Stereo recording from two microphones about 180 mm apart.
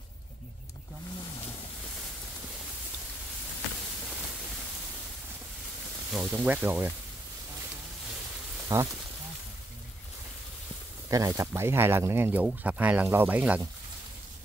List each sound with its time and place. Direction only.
6.1 s speech: 10° right (ahead or behind)
8.7 s speech: 20° right (ahead or behind)
11.1 s speech: 20° right (ahead or behind)